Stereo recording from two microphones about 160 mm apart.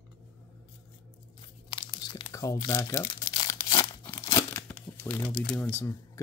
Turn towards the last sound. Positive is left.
turn(degrees=20)  # may be behind; listen again after turning